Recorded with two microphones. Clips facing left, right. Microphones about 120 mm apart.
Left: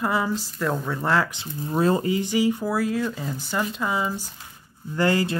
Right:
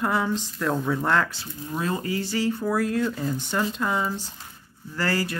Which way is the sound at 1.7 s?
35° left (ahead or behind).